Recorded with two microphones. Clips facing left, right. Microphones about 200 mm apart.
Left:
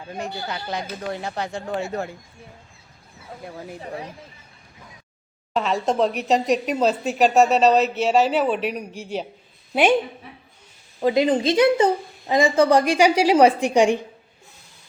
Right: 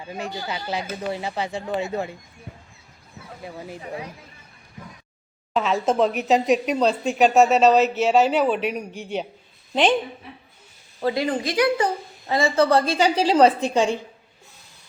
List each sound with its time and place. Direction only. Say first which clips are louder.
0.0 s speech: even; 5° right (ahead or behind)
3.4 s speech: even; 5° right (ahead or behind)
5.5 s a woman's voice: right 1 dB; centre (ahead or behind)
11.0 s a woman's voice: left 5 dB; 20° left (ahead or behind)